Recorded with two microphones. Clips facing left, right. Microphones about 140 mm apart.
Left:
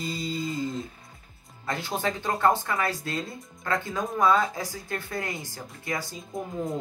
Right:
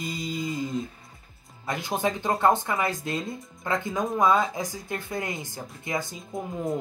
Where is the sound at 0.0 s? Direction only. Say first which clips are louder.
Even; 15° right (ahead or behind).